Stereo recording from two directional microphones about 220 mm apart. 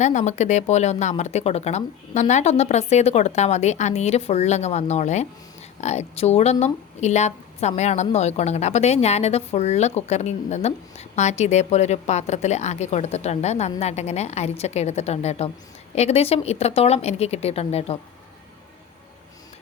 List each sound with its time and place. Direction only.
0.0 s a woman's voice: 35° left (ahead or behind)